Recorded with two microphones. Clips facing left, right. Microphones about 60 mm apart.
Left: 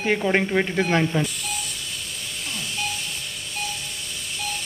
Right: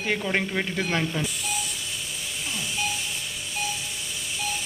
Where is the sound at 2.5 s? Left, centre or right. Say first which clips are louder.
Even; centre.